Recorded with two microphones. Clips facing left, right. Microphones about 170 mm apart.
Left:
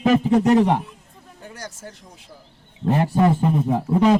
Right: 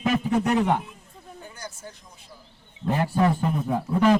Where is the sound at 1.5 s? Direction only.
80° left.